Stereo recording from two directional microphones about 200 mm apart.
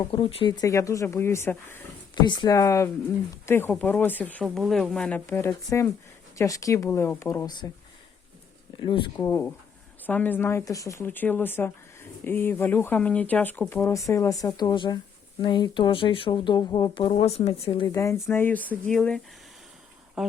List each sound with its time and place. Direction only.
0.1 s speech: 30° left (ahead or behind)
8.8 s speech: 20° left (ahead or behind); by 20.3 s centre (ahead or behind)